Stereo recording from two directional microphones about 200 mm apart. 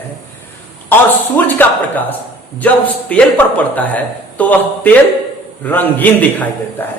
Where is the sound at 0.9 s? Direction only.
10° left (ahead or behind).